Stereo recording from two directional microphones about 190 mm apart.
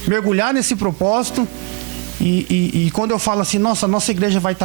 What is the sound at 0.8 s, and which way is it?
Speech, 30° right (ahead or behind).